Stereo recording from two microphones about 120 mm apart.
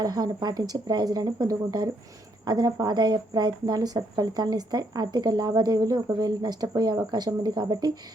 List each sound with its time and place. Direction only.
0.0 s speech: 35° right (ahead or behind)